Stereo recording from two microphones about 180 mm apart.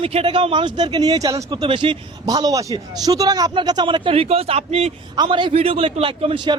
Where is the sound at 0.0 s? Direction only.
30° right (ahead or behind).